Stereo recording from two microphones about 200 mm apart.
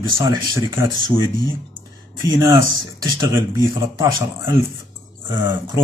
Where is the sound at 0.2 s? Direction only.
15° right (ahead or behind).